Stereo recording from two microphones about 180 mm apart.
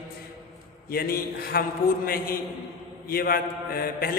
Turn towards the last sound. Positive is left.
turn(degrees=55)  # may be behind; listen again after turning